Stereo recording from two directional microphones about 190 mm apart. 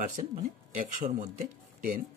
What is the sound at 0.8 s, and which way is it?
Speech, 45° right (ahead or behind).